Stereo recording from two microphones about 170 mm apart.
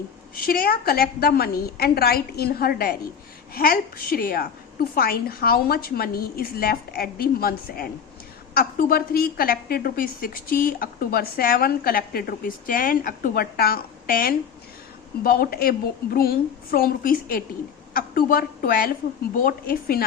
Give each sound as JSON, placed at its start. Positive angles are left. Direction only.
{"t": 0.4, "sound": "a woman's voice", "side_deg": 60}